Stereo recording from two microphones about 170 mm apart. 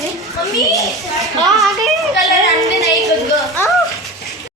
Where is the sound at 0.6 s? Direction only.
Centre (ahead or behind).